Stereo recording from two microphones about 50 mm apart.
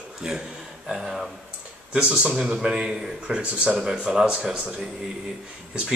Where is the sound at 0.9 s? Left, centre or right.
Centre.